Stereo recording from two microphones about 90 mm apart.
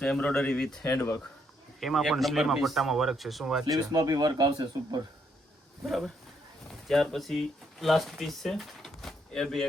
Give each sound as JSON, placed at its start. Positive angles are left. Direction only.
{"t": 0.0, "sound": "speech", "side_deg": 10}
{"t": 0.9, "sound": "speech", "side_deg": 25}
{"t": 1.8, "sound": "speech", "side_deg": 0}
{"t": 3.7, "sound": "speech", "side_deg": -45}
{"t": 5.8, "sound": "speech", "side_deg": 0}